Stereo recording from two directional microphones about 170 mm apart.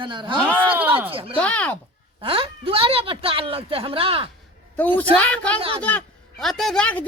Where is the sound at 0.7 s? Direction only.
10° right (ahead or behind).